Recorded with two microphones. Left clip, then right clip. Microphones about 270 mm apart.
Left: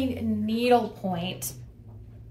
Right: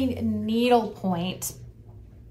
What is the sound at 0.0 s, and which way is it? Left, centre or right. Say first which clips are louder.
A woman's voice: right 1 dB; centre.